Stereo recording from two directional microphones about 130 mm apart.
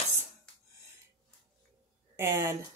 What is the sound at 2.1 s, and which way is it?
Speech, 20° right (ahead or behind).